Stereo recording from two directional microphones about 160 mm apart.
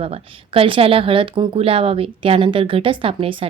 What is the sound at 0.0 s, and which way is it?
A woman's voice, 35° right (ahead or behind).